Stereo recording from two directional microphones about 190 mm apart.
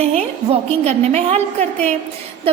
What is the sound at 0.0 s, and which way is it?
A woman's voice, 35° right (ahead or behind).